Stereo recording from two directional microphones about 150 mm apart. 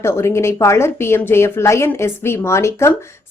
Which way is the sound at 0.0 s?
15° left (ahead or behind).